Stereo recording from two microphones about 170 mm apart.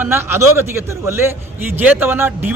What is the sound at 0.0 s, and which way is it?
Speech, 15° right (ahead or behind).